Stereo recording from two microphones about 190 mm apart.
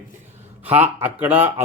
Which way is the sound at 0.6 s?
10° right (ahead or behind).